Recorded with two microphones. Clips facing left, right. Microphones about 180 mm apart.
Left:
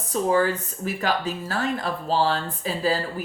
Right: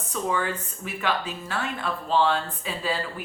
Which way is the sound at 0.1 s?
35° left (ahead or behind).